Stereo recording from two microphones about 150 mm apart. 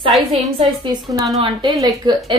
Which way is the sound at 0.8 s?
25° right (ahead or behind).